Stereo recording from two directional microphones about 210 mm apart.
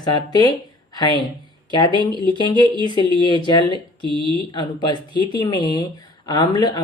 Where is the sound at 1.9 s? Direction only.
20° right (ahead or behind).